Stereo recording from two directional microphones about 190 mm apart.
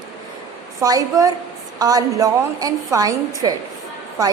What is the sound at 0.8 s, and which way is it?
A woman's voice, 20° right (ahead or behind).